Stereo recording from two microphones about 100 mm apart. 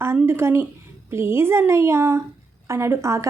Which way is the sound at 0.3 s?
25° right (ahead or behind).